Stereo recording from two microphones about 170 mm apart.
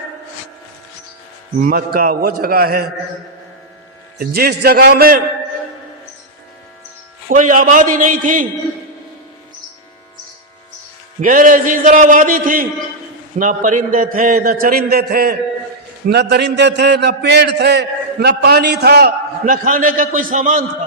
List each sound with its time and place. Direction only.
1.5 s a man's voice: 60° right (ahead or behind)
4.2 s a man's voice: 65° right (ahead or behind)
7.3 s a man's voice: 50° right (ahead or behind)
11.2 s a man's voice: 50° right (ahead or behind)
16.0 s a man's voice: 75° right (ahead or behind); by 20.7 s 50° right (ahead or behind)